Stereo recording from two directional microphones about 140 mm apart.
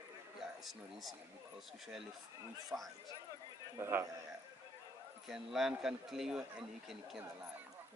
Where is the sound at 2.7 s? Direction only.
15° right (ahead or behind).